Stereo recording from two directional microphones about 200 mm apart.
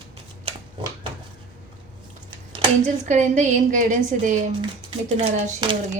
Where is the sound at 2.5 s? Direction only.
35° right (ahead or behind).